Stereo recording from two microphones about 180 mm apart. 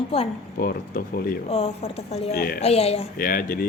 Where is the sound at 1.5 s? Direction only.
35° left (ahead or behind).